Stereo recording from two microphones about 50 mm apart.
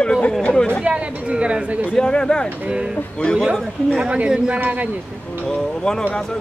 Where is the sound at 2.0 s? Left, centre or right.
Centre.